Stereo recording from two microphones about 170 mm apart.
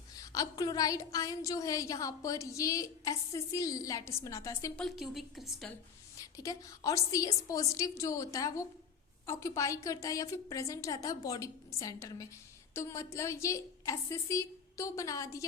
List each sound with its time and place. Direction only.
0.2 s a woman's voice: 20° left (ahead or behind)
4.8 s a woman's voice: centre (ahead or behind)
6.1 s a woman's voice: 20° left (ahead or behind)